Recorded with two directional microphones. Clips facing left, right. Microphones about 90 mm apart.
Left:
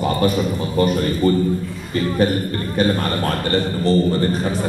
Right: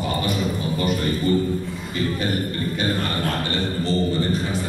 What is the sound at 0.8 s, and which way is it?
Speech, 45° left (ahead or behind).